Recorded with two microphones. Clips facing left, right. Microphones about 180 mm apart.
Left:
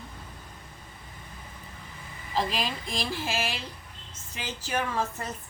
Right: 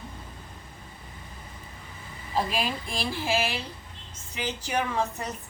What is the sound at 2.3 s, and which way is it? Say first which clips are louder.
A woman's voice: right 1 dB; 10° right (ahead or behind).